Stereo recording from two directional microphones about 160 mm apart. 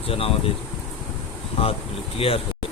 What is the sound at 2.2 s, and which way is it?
Speech, 35° left (ahead or behind).